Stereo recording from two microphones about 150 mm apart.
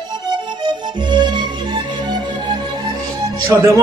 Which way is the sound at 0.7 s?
30° right (ahead or behind).